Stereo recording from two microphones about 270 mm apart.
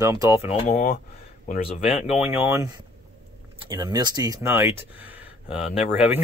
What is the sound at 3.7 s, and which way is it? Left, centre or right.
Speech, centre.